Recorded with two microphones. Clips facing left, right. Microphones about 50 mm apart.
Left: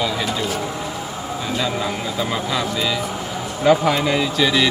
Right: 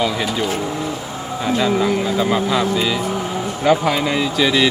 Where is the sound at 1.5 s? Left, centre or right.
Centre.